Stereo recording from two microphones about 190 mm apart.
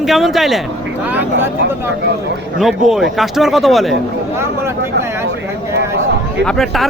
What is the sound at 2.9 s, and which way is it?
Speech, centre (ahead or behind).